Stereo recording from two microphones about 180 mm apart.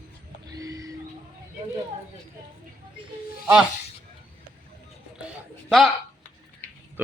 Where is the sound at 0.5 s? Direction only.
20° right (ahead or behind).